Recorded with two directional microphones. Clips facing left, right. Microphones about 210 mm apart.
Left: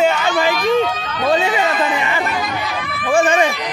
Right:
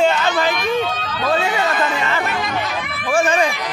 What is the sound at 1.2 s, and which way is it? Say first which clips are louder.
Speech: left 3 dB; 20° left (ahead or behind).